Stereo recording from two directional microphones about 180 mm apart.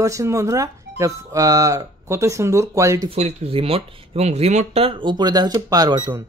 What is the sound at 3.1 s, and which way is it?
Speech, 35° right (ahead or behind).